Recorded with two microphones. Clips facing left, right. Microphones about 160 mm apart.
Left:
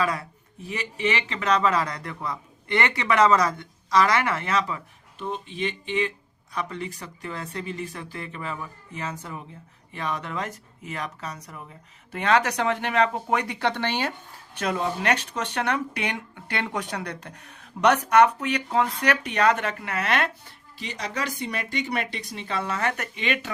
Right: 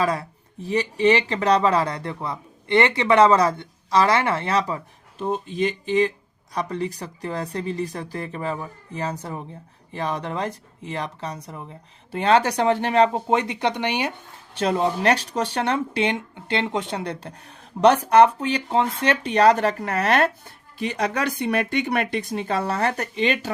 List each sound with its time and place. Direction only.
0.0 s speech: 30° right (ahead or behind); by 14.1 s 15° right (ahead or behind)
14.5 s speech: 30° right (ahead or behind)
20.7 s speech: 55° right (ahead or behind); by 23.5 s 35° right (ahead or behind)